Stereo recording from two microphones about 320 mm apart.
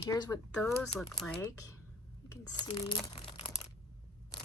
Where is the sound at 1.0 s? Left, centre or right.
Centre.